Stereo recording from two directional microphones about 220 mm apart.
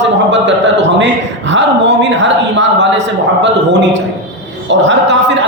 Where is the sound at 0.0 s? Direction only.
55° right (ahead or behind).